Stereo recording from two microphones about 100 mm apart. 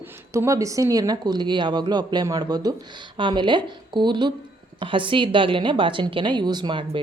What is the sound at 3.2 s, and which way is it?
A woman's voice, 50° right (ahead or behind).